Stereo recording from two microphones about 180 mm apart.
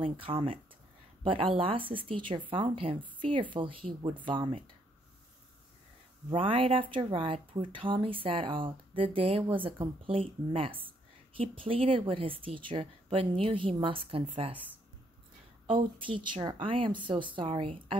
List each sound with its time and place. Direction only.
0.0 s speech: 30° right (ahead or behind)
6.3 s speech: 30° right (ahead or behind)
15.6 s speech: 30° right (ahead or behind)